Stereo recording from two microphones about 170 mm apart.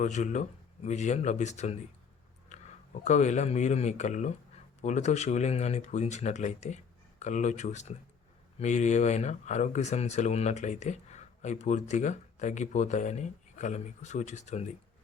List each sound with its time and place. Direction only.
0.0 s speech: 45° left (ahead or behind)
2.5 s a sound: 45° left (ahead or behind)
3.0 s speech: 45° left (ahead or behind)